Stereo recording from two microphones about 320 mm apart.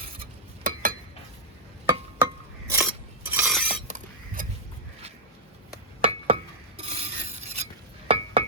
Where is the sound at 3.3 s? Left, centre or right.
Centre.